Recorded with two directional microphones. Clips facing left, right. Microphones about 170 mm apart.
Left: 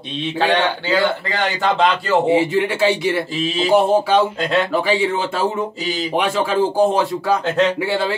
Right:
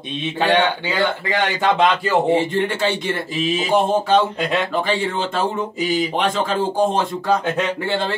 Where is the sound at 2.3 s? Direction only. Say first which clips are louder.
Left 2 dB; 5° left (ahead or behind).